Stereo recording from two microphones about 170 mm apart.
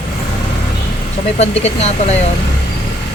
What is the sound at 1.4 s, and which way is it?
Speech, 40° left (ahead or behind).